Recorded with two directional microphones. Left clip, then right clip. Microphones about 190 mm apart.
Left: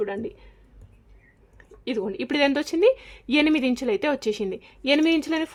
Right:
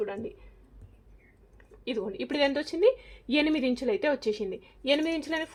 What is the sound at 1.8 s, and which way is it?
A woman's voice, 35° left (ahead or behind).